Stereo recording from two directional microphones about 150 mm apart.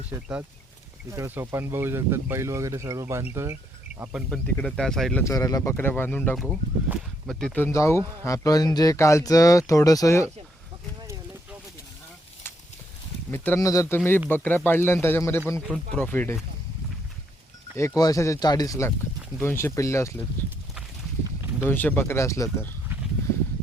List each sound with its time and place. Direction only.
0.1 s speech: 20° right (ahead or behind)
4.3 s speech: 5° left (ahead or behind)
5.2 s speech: 20° left (ahead or behind)
6.3 s speech: centre (ahead or behind); by 10.2 s 20° left (ahead or behind)
13.3 s speech: 15° left (ahead or behind)
17.7 s speech: 20° left (ahead or behind)
21.7 s speech: 15° left (ahead or behind)